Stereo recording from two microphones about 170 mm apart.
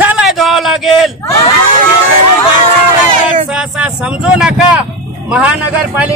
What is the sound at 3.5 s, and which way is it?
Speech, 5° right (ahead or behind).